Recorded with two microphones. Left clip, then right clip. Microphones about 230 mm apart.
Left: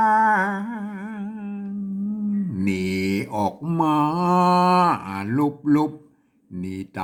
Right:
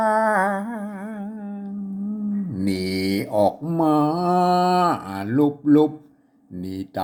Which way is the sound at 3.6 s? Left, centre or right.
Centre.